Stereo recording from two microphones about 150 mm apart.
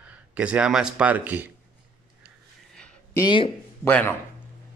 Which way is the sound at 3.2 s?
30° left (ahead or behind).